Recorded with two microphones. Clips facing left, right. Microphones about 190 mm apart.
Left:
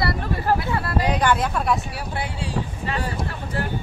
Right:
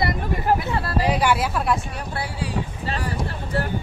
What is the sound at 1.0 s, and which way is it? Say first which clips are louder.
Speech: right 1 dB; 10° right (ahead or behind).